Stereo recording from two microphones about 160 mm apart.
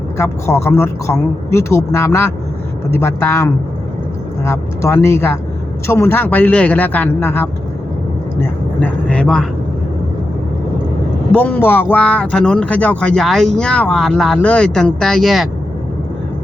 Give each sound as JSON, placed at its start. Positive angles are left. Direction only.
{"t": 0.2, "sound": "speech", "side_deg": 15}
{"t": 11.3, "sound": "speech", "side_deg": 10}